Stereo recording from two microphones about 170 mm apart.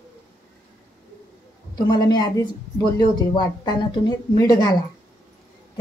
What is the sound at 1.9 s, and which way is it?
Speech, 25° left (ahead or behind).